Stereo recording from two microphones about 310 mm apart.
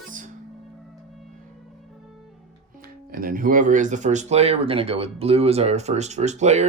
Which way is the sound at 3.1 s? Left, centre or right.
Right.